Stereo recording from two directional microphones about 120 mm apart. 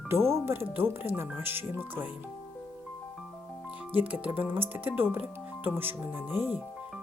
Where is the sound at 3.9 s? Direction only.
15° right (ahead or behind).